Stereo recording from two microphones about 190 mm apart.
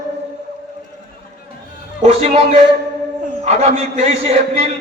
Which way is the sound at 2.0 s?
35° right (ahead or behind).